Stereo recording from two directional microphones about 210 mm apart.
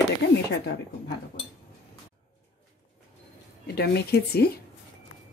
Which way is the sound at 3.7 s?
50° left (ahead or behind).